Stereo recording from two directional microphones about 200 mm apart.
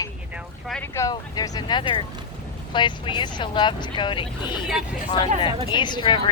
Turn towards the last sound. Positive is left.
turn(degrees=20)  # may be behind; listen again after turning